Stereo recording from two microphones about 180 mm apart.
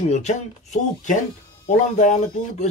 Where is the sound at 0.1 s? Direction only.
40° left (ahead or behind).